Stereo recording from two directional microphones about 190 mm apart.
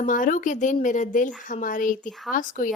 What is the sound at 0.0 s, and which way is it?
A woman's voice, 45° left (ahead or behind).